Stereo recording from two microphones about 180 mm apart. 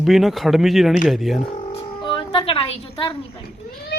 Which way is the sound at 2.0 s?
25° left (ahead or behind).